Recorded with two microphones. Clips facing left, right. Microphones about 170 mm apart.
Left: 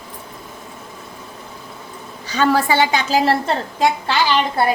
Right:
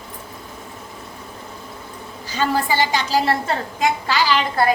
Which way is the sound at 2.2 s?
75° left (ahead or behind).